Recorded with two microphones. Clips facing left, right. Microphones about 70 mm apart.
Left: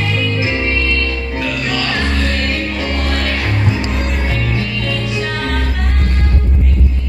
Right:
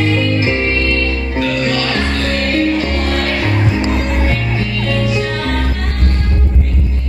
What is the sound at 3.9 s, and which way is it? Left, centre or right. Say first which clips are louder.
Music: right 3 dB; centre.